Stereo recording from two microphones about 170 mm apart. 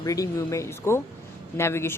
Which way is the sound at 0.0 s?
20° left (ahead or behind).